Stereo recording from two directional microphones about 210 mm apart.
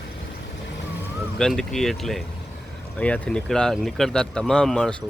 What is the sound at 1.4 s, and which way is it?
Speech, centre (ahead or behind).